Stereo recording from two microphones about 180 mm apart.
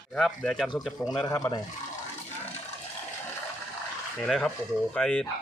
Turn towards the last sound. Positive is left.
turn(degrees=5)  # may be behind; listen again after turning